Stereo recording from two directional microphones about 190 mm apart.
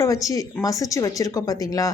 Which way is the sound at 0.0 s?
15° left (ahead or behind).